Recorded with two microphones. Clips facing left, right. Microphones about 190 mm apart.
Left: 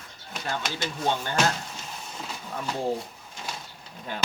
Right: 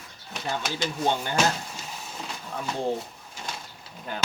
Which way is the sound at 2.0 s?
Centre (ahead or behind).